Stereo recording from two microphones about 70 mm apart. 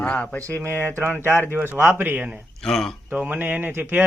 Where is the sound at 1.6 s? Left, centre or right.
Right.